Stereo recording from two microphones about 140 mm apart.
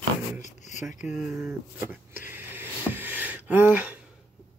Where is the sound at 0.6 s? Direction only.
65° left (ahead or behind).